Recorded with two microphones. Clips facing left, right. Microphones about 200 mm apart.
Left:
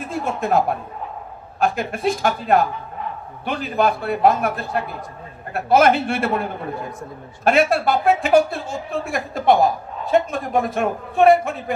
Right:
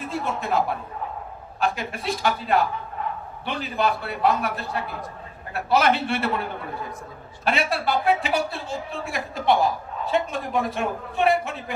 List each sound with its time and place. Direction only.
0.1 s a woman's voice: 50° left (ahead or behind)
7.4 s a woman's voice: 45° left (ahead or behind)